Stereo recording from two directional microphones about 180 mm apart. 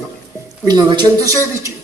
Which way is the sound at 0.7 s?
25° right (ahead or behind).